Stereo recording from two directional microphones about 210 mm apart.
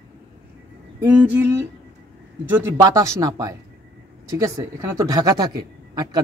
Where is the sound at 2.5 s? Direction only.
15° right (ahead or behind).